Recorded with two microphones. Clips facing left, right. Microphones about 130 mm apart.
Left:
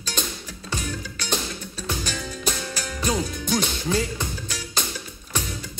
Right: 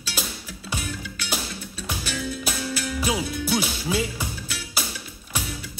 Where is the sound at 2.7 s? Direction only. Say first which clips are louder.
Right 4 dB; 40° left (ahead or behind).